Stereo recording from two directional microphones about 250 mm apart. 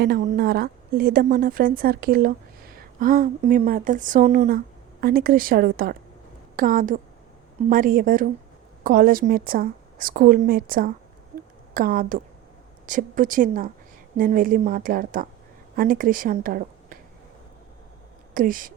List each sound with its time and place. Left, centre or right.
0.0 s a woman's voice: right
18.3 s a woman's voice: right